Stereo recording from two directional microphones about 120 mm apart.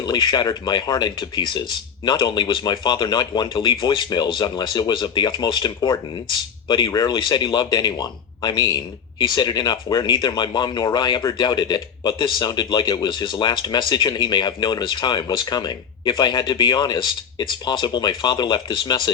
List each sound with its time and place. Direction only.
0.0 s speech: 40° left (ahead or behind)